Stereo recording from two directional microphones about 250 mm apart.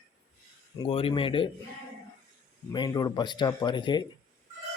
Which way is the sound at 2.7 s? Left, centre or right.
Centre.